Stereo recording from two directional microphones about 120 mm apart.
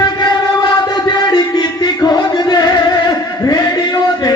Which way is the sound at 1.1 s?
35° left (ahead or behind).